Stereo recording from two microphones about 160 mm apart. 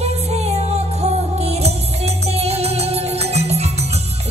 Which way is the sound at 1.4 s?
40° right (ahead or behind).